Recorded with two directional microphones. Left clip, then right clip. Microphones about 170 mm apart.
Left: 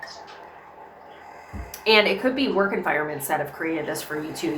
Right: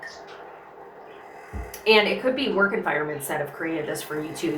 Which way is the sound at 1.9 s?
20° left (ahead or behind).